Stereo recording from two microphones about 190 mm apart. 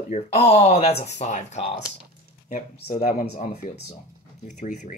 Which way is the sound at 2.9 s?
35° left (ahead or behind).